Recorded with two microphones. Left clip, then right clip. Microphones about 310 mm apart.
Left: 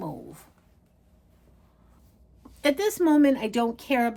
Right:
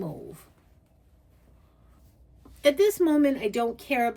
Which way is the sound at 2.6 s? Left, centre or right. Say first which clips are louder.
Right 3 dB; left.